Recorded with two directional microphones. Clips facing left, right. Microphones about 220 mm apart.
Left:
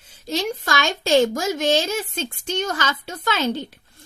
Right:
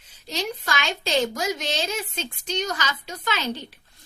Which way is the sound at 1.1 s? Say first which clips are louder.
Left 7 dB; 50° left (ahead or behind).